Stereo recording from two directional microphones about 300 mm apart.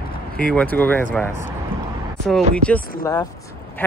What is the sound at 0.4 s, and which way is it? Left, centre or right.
Speech, centre.